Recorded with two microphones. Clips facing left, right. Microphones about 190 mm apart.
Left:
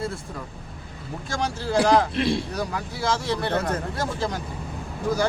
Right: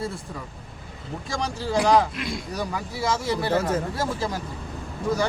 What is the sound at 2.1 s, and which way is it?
Speech, 30° left (ahead or behind).